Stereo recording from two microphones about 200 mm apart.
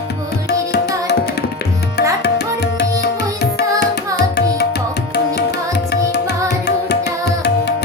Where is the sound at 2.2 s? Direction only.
55° left (ahead or behind).